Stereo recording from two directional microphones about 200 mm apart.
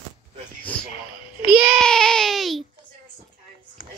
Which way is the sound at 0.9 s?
25° left (ahead or behind).